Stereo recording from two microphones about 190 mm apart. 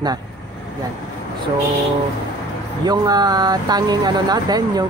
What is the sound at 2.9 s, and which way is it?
Speech, 20° right (ahead or behind).